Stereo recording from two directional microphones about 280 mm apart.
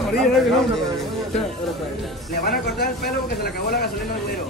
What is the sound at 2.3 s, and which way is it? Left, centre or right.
Speech, left.